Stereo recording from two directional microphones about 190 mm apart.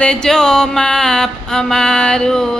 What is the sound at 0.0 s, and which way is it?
Mantra, 5° left (ahead or behind).